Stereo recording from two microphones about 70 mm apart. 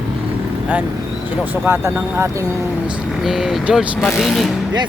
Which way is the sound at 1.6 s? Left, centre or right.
Right.